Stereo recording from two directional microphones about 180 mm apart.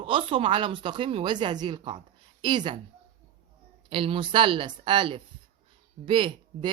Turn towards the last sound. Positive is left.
turn(degrees=-30)  # may be behind; listen again after turning